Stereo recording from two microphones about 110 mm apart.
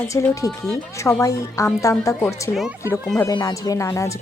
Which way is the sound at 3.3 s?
40° left (ahead or behind).